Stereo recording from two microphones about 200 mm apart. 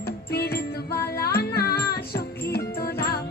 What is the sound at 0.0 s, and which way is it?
Music, 50° left (ahead or behind).